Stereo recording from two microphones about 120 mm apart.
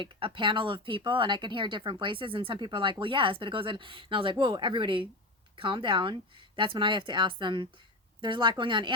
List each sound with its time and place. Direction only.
0.0 s speech: 45° right (ahead or behind)